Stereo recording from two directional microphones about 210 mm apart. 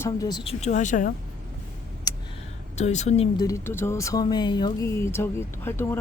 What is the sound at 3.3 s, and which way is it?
Speech, 15° left (ahead or behind).